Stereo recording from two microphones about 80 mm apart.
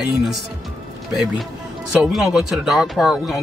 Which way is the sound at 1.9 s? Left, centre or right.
Centre.